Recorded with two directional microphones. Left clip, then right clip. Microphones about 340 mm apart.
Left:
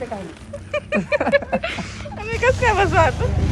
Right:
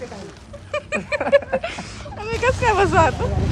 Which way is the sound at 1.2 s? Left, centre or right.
Left.